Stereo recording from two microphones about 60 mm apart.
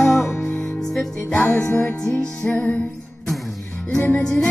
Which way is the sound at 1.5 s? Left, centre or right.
Centre.